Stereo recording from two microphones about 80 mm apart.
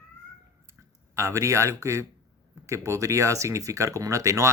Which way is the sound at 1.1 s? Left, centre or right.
Right.